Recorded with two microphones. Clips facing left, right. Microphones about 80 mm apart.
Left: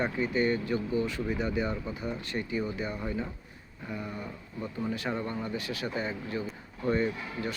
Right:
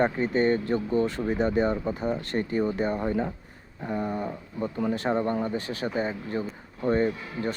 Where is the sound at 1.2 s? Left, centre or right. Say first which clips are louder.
Right 6 dB; right.